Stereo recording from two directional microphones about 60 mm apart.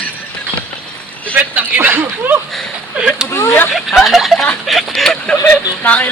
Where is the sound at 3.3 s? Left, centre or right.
Left.